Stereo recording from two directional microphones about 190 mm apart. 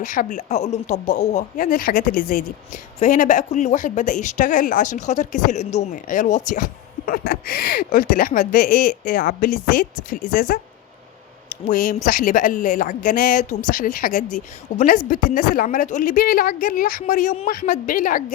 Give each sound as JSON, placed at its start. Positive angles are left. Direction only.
{"t": 0.0, "sound": "speech", "side_deg": 45}
{"t": 11.7, "sound": "speech", "side_deg": 45}